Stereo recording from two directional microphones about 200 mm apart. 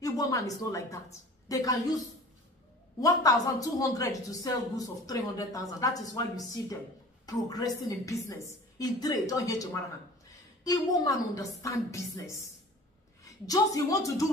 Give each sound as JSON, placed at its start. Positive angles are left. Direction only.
{"t": 0.0, "sound": "a woman's voice", "side_deg": 15}
{"t": 3.0, "sound": "a woman's voice", "side_deg": 15}